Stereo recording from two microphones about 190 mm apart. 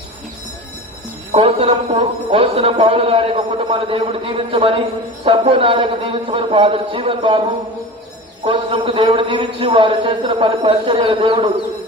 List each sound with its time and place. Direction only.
1.3 s a man's voice: 30° right (ahead or behind)
8.4 s a man's voice: 30° right (ahead or behind)